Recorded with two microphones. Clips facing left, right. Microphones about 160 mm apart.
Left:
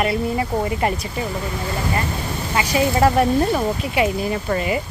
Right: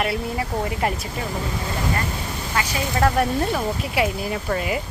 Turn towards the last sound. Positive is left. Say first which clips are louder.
# left 3 dB
turn(degrees=0)  # may be behind; listen again after turning